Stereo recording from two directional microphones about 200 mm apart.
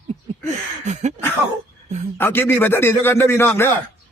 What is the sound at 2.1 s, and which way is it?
A man's voice, 10° left (ahead or behind).